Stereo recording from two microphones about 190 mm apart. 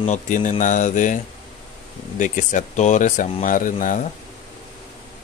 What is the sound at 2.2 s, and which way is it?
Speech, 45° left (ahead or behind).